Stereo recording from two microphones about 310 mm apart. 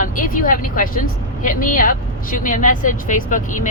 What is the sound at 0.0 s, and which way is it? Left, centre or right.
Speech, left.